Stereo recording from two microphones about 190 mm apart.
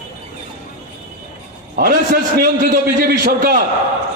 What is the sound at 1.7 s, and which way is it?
A man's voice, 50° right (ahead or behind).